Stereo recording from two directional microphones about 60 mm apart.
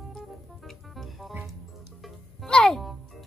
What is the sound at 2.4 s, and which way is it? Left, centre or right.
Speech, centre.